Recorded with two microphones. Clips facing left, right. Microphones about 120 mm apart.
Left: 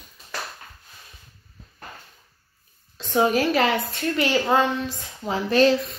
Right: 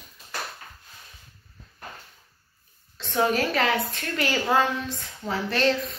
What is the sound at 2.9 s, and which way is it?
Speech, 15° left (ahead or behind).